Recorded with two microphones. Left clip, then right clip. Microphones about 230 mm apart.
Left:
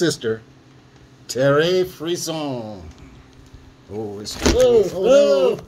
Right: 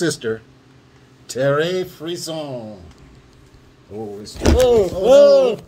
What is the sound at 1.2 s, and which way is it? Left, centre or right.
Speech, centre.